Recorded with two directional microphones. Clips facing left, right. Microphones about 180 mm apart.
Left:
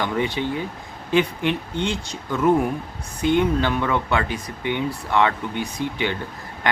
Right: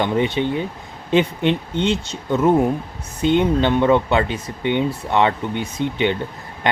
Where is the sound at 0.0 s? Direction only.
25° right (ahead or behind).